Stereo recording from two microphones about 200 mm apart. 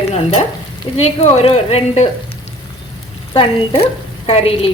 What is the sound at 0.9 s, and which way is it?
Speech, 30° left (ahead or behind).